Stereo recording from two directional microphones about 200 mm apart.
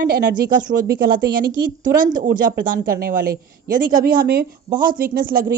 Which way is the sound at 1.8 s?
40° right (ahead or behind).